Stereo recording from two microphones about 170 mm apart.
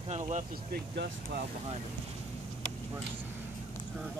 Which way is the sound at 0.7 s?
60° right (ahead or behind).